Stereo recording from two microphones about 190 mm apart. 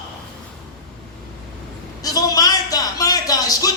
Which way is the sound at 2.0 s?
20° left (ahead or behind).